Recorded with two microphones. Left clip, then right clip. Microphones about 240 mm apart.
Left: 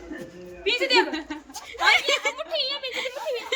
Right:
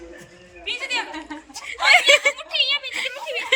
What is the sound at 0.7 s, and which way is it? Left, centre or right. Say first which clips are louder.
Speech: left 5 dB; left.